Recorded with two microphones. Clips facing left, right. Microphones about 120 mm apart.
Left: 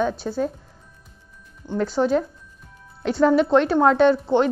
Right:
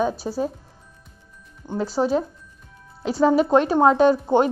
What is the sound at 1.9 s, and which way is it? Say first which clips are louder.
Speech: even; 5° right (ahead or behind).